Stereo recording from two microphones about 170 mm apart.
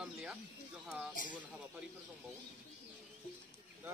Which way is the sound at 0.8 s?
5° right (ahead or behind).